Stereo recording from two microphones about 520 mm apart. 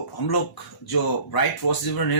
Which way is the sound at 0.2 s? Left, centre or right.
Left.